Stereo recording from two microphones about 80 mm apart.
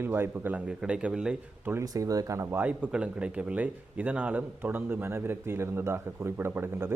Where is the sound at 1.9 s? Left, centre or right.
Right.